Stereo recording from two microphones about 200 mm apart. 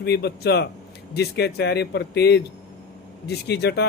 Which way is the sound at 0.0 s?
55° left (ahead or behind).